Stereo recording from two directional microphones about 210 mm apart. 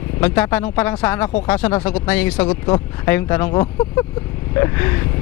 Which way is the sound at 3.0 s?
10° left (ahead or behind).